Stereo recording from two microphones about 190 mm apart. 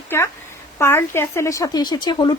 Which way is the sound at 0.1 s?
10° left (ahead or behind).